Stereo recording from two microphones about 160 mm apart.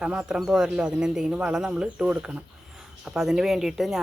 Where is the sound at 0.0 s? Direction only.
5° right (ahead or behind).